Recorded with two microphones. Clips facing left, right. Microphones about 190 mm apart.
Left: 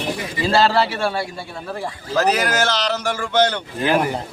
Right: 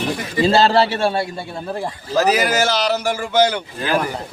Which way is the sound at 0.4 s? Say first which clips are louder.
Right 2 dB; 25° right (ahead or behind).